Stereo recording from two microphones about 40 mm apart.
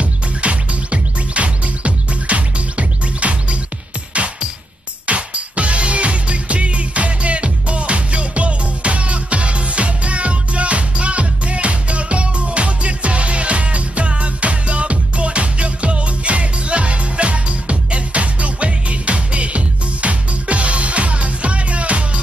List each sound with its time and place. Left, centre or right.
0.0 s music: right